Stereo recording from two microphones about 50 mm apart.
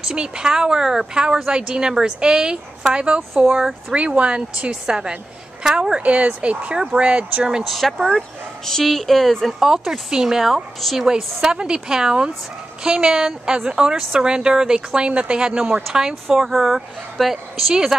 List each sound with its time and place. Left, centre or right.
0.1 s a woman's voice: centre
6.0 s speech: right
7.6 s speech: centre
9.6 s a woman's voice: centre
11.4 s a woman's voice: centre